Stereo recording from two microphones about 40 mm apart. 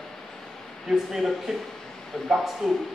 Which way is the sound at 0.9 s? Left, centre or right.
Centre.